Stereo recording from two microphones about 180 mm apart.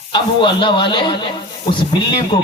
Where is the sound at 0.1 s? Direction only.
25° left (ahead or behind).